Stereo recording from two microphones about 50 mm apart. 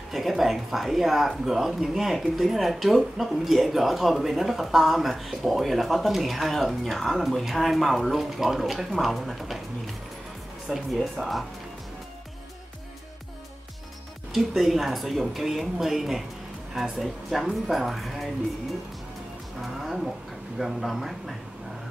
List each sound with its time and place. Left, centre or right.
0.1 s speech: centre
10.7 s speech: centre
14.3 s speech: centre
19.6 s speech: centre